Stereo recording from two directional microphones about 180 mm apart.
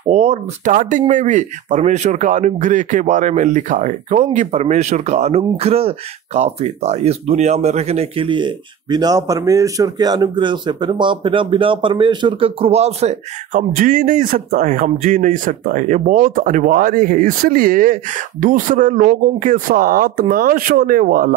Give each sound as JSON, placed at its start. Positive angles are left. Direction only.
{"t": 0.1, "sound": "speech", "side_deg": -40}